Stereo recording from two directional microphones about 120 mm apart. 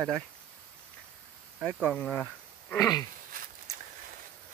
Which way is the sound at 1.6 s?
10° left (ahead or behind).